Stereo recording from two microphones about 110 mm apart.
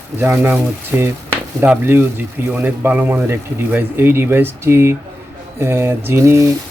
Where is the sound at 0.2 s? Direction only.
20° right (ahead or behind).